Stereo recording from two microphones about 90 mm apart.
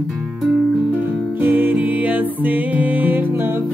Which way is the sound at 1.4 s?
20° right (ahead or behind).